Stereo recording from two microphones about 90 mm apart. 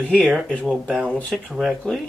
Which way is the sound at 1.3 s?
Centre (ahead or behind).